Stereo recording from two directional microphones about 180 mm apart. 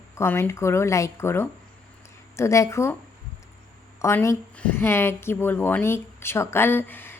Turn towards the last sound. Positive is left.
turn(degrees=10)  # may be behind; listen again after turning